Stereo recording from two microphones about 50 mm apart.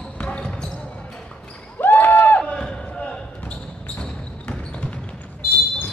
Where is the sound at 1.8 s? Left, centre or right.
Left.